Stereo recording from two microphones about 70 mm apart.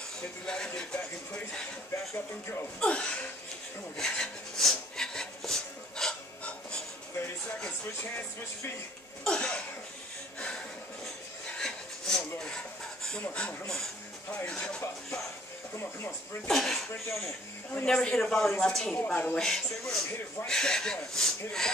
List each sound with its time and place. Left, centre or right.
0.5 s speech: centre
2.8 s speech: centre
8.0 s speech: left
9.2 s speech: centre
11.4 s a sound: centre
13.2 s speech: left
16.4 s speech: centre
17.8 s speech: centre
18.9 s speech: left
19.3 s speech: centre